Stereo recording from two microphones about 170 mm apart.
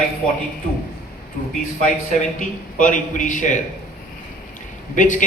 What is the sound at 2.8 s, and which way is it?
Speech, 50° left (ahead or behind).